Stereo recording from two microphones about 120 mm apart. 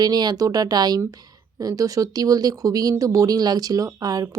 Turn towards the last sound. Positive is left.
turn(degrees=-30)  # may be behind; listen again after turning